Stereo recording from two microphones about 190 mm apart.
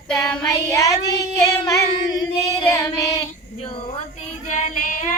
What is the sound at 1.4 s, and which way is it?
Female singing, 15° left (ahead or behind).